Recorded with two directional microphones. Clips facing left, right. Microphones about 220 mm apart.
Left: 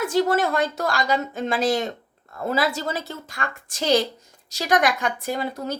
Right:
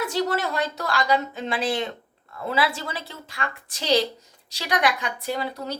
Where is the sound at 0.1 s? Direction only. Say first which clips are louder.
Left 5 dB; 50° left (ahead or behind).